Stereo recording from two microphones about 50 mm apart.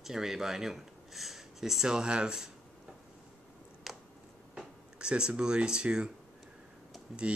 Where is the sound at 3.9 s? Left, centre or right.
Centre.